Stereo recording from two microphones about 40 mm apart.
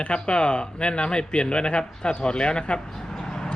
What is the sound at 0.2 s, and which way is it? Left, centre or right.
Speech, left.